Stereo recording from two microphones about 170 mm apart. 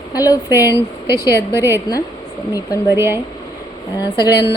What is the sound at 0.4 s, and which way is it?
Speech, 15° right (ahead or behind).